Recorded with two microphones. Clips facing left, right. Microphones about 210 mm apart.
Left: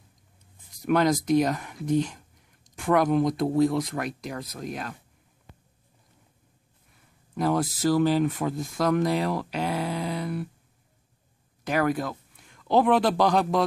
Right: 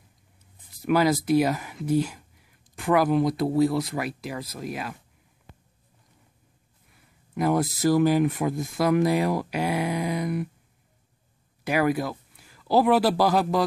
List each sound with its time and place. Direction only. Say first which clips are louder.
0.8 s speech: right 1 dB; 5° right (ahead or behind)
7.3 s speech: right 2 dB; 10° right (ahead or behind)
11.6 s a man's voice: right 2 dB; 10° right (ahead or behind)